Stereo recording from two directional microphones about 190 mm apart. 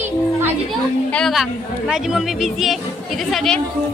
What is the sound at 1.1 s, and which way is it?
Speech, 5° left (ahead or behind).